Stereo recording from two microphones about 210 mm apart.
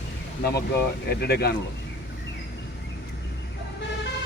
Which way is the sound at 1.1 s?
50° left (ahead or behind).